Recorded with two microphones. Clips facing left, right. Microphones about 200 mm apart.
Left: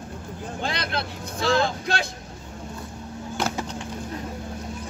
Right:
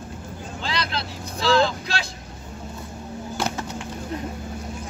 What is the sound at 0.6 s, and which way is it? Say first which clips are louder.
Vehicle: even; 50° left (ahead or behind).